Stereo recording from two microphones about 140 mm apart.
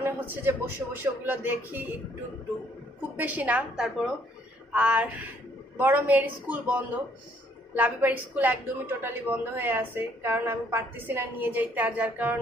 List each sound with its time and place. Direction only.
0.0 s a woman's voice: 15° right (ahead or behind)
3.2 s a woman's voice: 10° right (ahead or behind)